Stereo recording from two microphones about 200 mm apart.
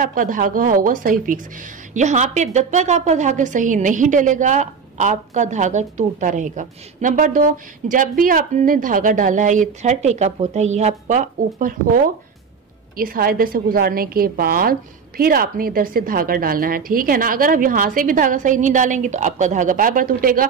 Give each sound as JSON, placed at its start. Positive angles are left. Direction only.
{"t": 0.0, "sound": "a woman's voice", "side_deg": -40}
{"t": 12.9, "sound": "a woman's voice", "side_deg": -45}